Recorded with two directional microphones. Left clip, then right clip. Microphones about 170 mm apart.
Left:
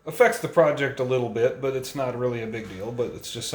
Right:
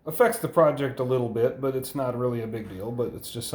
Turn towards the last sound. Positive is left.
turn(degrees=-20)  # may be behind; listen again after turning